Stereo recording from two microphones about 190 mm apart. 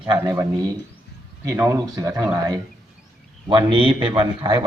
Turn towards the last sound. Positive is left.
turn(degrees=-25)  # may be behind; listen again after turning